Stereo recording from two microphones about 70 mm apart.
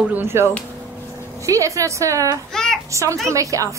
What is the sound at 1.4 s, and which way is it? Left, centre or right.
Speech, right.